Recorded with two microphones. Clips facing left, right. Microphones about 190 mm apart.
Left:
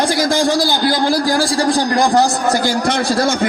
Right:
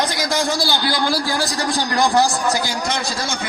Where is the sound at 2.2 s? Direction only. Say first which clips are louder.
Left 3 dB; 20° left (ahead or behind).